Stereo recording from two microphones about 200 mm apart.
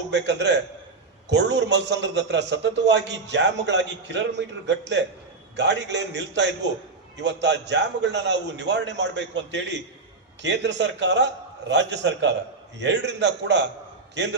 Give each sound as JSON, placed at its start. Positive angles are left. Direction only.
{"t": 0.1, "sound": "a man's voice", "side_deg": -60}